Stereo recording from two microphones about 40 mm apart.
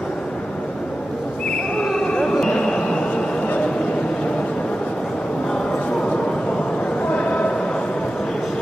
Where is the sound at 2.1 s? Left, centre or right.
Left.